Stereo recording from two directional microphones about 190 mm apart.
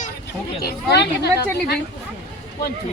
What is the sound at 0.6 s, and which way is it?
Speech, 55° left (ahead or behind).